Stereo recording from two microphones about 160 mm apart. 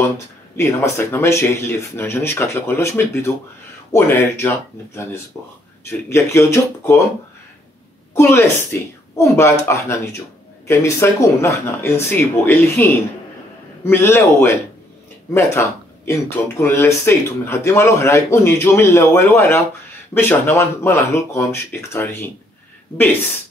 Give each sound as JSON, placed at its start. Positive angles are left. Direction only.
{"t": 0.6, "sound": "speech", "side_deg": 15}
{"t": 8.1, "sound": "speech", "side_deg": 15}
{"t": 16.1, "sound": "speech", "side_deg": 15}